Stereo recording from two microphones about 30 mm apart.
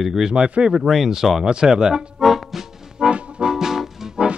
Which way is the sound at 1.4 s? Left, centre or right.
Right.